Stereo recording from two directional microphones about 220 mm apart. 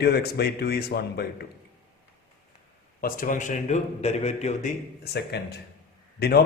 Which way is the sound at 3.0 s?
40° left (ahead or behind).